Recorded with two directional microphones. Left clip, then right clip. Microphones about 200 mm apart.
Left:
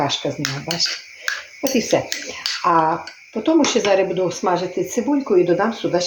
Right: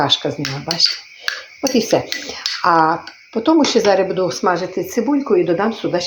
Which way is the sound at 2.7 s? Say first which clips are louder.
Right 3 dB; 25° right (ahead or behind).